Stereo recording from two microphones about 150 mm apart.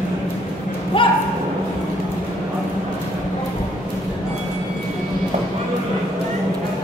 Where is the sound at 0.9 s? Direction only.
35° left (ahead or behind).